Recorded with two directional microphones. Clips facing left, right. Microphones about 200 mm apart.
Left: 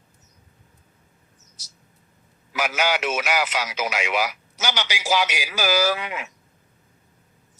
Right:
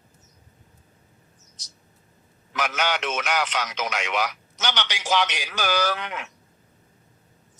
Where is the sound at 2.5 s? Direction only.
10° left (ahead or behind).